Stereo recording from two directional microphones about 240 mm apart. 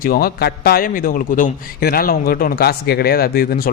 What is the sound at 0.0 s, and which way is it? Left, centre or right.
A man's voice, left.